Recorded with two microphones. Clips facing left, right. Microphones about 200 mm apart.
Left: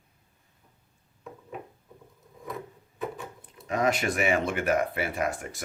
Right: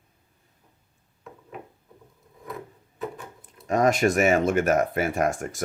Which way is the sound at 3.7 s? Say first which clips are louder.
Right 5 dB; 45° right (ahead or behind).